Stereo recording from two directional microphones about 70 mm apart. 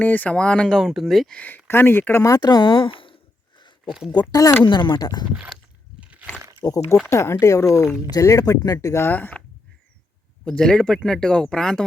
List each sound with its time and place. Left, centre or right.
0.0 s speech: left
0.8 s speech: centre
1.3 s speech: left
2.4 s speech: left
3.8 s speech: centre
4.1 s speech: left
4.7 s speech: left
6.6 s speech: left
8.4 s speech: left
9.0 s speech: left
10.4 s speech: centre